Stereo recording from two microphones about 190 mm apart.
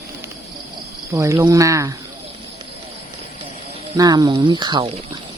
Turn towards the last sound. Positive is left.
turn(degrees=-25)  # may be behind; listen again after turning